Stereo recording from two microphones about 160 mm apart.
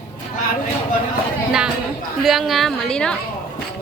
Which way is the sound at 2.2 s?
Centre (ahead or behind).